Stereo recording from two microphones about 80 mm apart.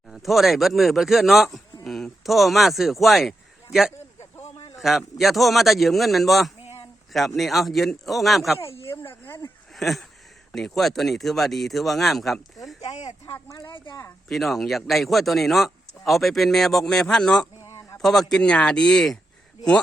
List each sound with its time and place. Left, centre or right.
0.1 s speech: centre
8.6 s chop: left
9.7 s speech: centre
13.5 s speech: left
14.3 s speech: centre
17.6 s a sound: left
18.0 s speech: centre